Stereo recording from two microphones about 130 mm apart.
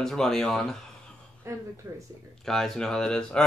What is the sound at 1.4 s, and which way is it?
Speech, 20° right (ahead or behind).